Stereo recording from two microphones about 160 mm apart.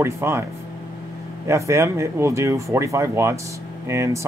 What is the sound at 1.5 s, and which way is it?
Speech, 20° right (ahead or behind).